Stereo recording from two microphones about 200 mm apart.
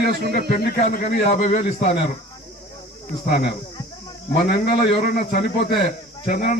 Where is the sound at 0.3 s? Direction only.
50° left (ahead or behind).